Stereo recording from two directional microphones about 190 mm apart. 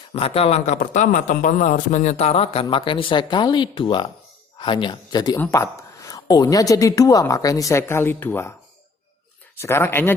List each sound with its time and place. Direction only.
0.1 s speech: 30° left (ahead or behind); by 8.5 s 10° left (ahead or behind)
9.6 s speech: 15° left (ahead or behind)